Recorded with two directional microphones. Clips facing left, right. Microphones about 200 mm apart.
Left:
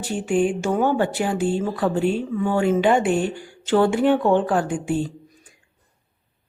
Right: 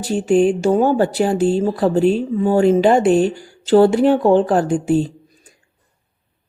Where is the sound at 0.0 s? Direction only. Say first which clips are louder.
Right 6 dB; 35° right (ahead or behind).